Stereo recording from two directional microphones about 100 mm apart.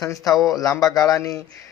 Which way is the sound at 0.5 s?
35° left (ahead or behind).